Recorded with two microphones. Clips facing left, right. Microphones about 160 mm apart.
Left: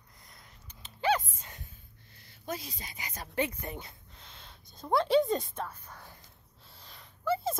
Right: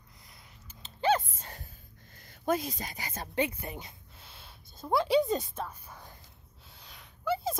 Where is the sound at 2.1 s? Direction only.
50° right (ahead or behind).